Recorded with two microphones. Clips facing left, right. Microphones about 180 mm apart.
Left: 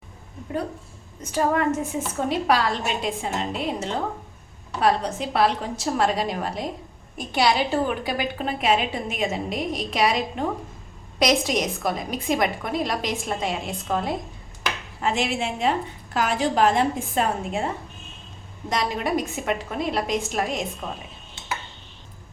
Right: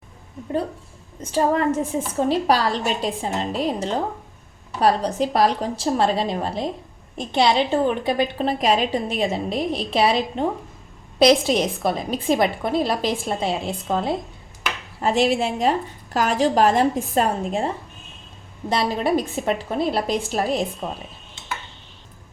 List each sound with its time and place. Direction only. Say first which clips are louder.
1.2 s a woman's voice: right 2 dB; 30° right (ahead or behind)
15.0 s a woman's voice: right 5 dB; 35° right (ahead or behind)
18.7 s a woman's voice: right 4 dB; 30° right (ahead or behind)